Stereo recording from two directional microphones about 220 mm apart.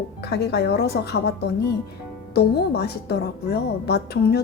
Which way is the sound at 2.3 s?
45° left (ahead or behind).